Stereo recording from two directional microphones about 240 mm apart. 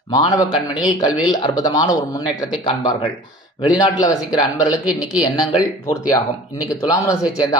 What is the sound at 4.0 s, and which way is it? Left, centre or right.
Speech, centre.